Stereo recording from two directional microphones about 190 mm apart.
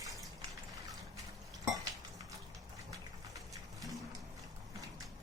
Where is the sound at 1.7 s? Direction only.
20° right (ahead or behind).